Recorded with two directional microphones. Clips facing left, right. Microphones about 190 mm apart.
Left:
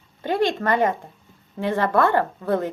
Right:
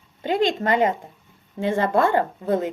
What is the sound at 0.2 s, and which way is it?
A woman's voice, 15° right (ahead or behind).